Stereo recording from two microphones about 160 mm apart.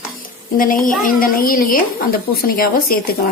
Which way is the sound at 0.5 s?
60° left (ahead or behind).